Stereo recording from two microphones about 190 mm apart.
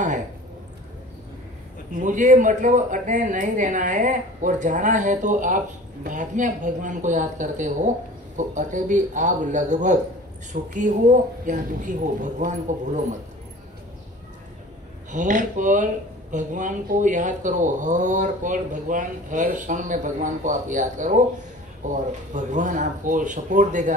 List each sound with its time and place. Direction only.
2.0 s speech: 40° right (ahead or behind)
15.0 s speech: 40° right (ahead or behind)